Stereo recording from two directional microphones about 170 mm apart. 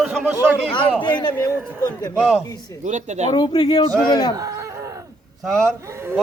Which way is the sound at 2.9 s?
45° right (ahead or behind).